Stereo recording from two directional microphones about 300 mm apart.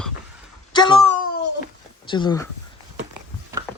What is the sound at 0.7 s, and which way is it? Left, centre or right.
Speech, centre.